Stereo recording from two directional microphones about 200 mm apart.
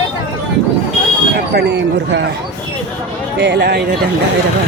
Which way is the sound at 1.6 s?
60° right (ahead or behind).